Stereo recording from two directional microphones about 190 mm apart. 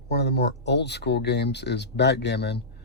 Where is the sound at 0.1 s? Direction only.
60° left (ahead or behind).